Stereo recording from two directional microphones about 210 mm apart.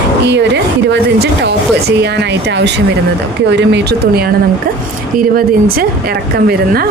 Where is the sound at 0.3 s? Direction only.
55° right (ahead or behind).